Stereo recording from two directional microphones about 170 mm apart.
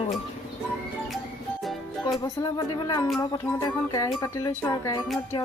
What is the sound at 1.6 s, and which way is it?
Music, centre (ahead or behind).